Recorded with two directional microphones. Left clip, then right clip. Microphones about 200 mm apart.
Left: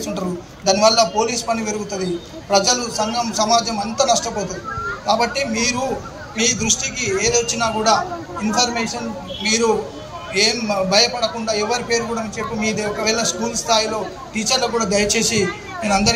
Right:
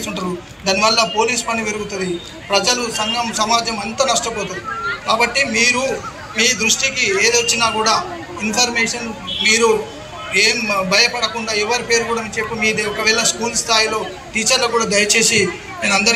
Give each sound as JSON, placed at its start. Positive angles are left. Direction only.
{"t": 0.7, "sound": "a man's voice", "side_deg": 65}
{"t": 4.3, "sound": "speech", "side_deg": 40}
{"t": 5.0, "sound": "a man's voice", "side_deg": 65}